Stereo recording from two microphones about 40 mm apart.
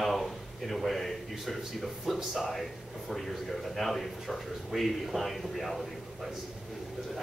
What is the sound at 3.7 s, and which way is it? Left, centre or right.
A man's voice, centre.